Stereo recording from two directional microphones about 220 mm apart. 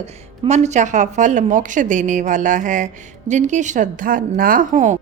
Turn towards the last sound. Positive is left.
turn(degrees=-35)  # may be behind; listen again after turning